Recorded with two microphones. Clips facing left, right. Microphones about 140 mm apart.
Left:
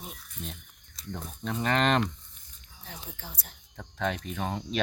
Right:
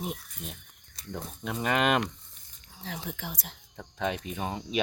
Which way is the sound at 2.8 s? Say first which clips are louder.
Right 7 dB; 90° right.